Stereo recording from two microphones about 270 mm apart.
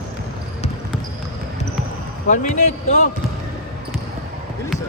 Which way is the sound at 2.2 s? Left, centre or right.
Left.